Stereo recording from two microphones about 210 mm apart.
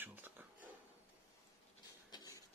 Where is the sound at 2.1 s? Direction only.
15° left (ahead or behind).